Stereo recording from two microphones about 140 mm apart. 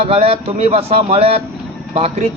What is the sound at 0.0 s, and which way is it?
Speech, 45° right (ahead or behind).